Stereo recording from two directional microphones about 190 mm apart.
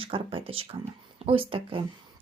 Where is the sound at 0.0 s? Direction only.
25° right (ahead or behind).